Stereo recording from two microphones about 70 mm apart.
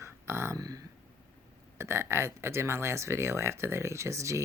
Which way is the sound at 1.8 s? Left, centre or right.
Right.